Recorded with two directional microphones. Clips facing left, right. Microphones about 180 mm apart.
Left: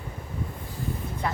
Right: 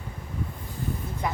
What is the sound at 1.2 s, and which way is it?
Speech, 15° right (ahead or behind).